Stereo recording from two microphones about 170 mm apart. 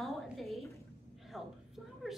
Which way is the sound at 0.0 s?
Centre (ahead or behind).